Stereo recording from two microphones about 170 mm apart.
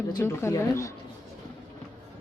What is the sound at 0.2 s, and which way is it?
Speech, 15° left (ahead or behind).